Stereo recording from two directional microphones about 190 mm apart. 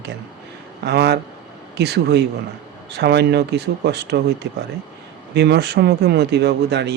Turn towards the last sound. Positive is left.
turn(degrees=-65)  # may be behind; listen again after turning